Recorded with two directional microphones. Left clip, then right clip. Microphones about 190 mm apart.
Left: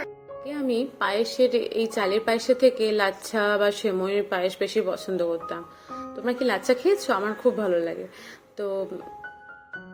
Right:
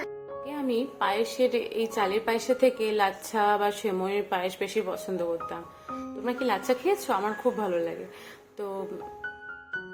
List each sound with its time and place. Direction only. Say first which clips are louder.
0.4 s a woman's voice: left 3 dB; 15° left (ahead or behind)